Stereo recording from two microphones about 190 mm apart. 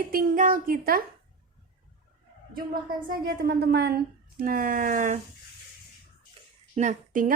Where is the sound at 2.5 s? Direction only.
50° right (ahead or behind).